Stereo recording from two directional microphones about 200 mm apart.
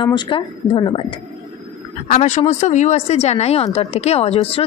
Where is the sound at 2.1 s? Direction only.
35° left (ahead or behind).